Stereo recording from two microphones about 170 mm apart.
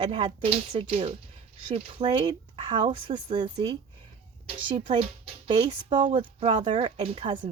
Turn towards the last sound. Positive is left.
turn(degrees=-30)  # may be behind; listen again after turning